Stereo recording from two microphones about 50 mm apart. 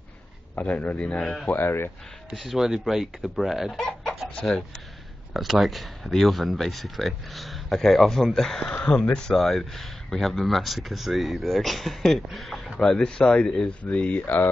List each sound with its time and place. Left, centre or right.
0.6 s speech: left; by 1.5 s centre
1.5 s speech: left
2.3 s speech: centre
3.7 s chicken: centre
4.4 s speech: centre
5.3 s speech: centre
12.8 s speech: centre
14.2 s speech: left